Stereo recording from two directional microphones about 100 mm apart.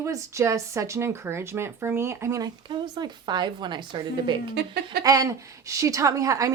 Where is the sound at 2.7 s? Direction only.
45° right (ahead or behind).